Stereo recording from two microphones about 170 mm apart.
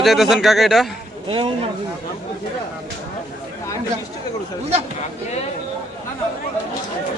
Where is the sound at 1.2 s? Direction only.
35° right (ahead or behind).